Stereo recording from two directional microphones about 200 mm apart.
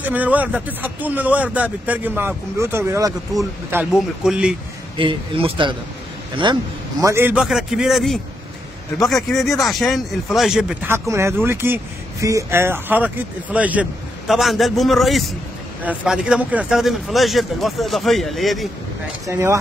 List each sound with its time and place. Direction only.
0.0 s a man's voice: 10° right (ahead or behind)
3.7 s speech: 5° right (ahead or behind)
4.9 s a man's voice: 25° right (ahead or behind); by 18.7 s centre (ahead or behind)
19.2 s a man's voice: 15° right (ahead or behind)